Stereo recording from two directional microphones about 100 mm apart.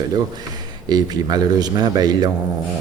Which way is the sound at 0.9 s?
40° right (ahead or behind).